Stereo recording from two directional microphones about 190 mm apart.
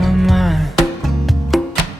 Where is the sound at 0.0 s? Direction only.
Centre (ahead or behind).